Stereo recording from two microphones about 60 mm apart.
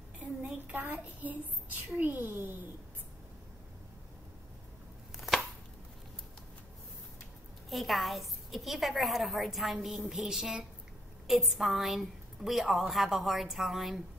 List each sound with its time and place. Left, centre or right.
0.2 s child singing: right
5.1 s chopping: centre
7.7 s a woman's voice: centre